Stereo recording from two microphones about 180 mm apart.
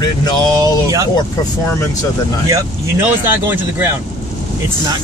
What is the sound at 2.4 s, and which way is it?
Speech, 15° right (ahead or behind).